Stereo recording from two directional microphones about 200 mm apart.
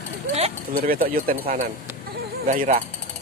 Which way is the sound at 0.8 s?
45° right (ahead or behind).